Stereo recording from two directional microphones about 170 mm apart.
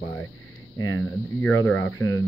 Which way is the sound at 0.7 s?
20° left (ahead or behind).